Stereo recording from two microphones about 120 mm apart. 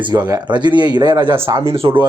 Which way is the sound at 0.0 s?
35° right (ahead or behind).